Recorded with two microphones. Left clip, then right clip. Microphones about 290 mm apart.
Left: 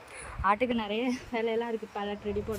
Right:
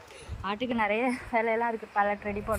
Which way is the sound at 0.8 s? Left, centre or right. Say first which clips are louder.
Right 5 dB; right.